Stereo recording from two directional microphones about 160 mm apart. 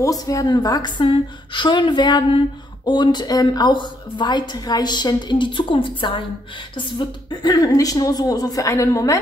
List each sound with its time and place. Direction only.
0.0 s a woman's voice: 20° left (ahead or behind)